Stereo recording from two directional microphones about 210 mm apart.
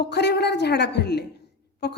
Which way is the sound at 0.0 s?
55° left (ahead or behind).